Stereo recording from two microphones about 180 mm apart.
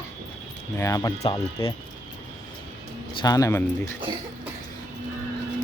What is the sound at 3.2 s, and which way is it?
Speech, 20° left (ahead or behind).